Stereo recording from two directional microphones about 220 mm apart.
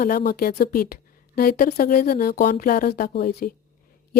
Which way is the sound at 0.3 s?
45° left (ahead or behind).